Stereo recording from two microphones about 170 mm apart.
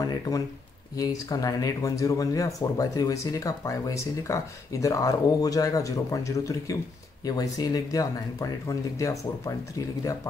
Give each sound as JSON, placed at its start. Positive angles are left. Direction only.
{"t": 0.0, "sound": "speech", "side_deg": 25}